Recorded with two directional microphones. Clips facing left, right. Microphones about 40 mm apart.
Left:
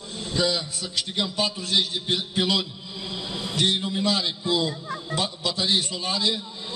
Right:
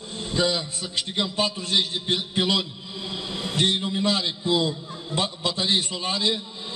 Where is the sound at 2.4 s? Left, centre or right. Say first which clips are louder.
Even; centre.